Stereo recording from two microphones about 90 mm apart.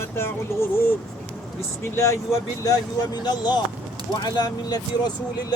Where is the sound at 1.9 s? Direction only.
35° left (ahead or behind).